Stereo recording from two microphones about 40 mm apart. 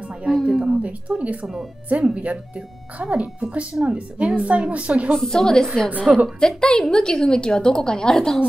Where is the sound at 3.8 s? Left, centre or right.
Right.